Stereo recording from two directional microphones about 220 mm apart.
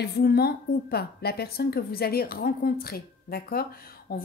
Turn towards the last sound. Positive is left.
turn(degrees=45)  # may be behind; listen again after turning